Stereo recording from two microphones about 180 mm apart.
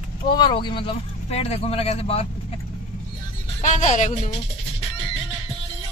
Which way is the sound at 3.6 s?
40° left (ahead or behind).